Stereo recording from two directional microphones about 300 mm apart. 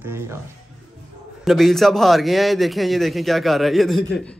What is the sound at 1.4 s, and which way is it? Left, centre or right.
A man's voice, centre.